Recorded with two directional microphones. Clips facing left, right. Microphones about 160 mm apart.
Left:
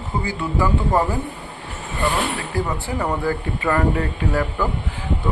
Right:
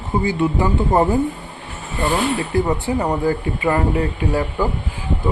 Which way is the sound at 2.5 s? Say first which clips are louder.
Right 4 dB; 20° right (ahead or behind).